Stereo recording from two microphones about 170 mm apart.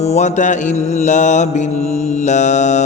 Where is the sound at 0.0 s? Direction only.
40° left (ahead or behind).